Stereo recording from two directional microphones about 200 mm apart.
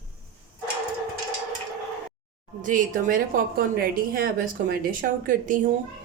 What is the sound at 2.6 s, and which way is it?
A woman's voice, 45° right (ahead or behind).